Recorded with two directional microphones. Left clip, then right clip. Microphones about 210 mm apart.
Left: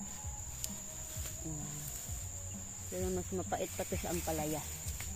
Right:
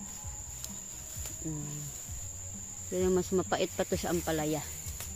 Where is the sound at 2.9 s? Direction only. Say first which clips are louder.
Right 10 dB; 60° right (ahead or behind).